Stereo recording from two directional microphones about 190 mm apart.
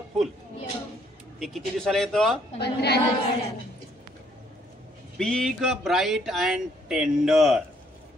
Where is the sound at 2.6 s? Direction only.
60° left (ahead or behind).